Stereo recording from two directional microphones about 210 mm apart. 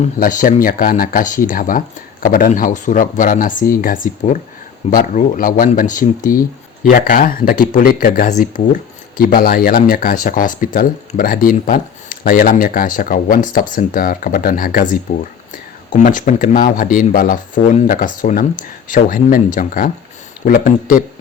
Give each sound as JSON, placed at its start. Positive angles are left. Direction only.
{"t": 0.0, "sound": "speech", "side_deg": 40}